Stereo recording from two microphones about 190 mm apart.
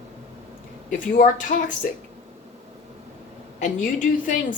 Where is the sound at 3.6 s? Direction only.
45° left (ahead or behind).